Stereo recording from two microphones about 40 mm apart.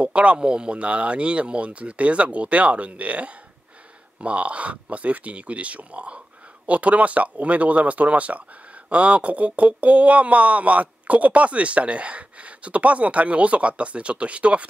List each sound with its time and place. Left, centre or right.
0.0 s speech: right